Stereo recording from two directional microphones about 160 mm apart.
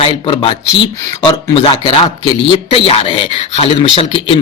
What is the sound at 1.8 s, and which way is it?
A man's voice, 30° left (ahead or behind).